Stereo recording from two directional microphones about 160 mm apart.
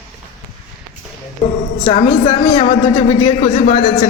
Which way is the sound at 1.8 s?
40° left (ahead or behind).